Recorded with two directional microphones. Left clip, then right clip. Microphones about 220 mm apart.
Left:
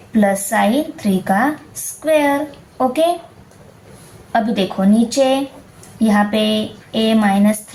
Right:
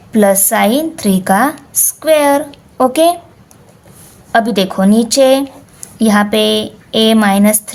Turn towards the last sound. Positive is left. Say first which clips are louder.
# right 5 dB
turn(degrees=-50)  # may be behind; listen again after turning